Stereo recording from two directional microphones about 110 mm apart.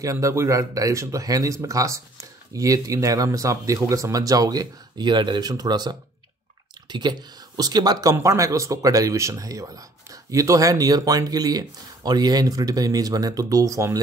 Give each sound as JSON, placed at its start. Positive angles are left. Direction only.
{"t": 0.0, "sound": "speech", "side_deg": -30}